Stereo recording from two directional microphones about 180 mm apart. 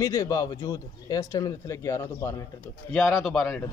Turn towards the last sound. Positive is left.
turn(degrees=0)  # may be behind; listen again after turning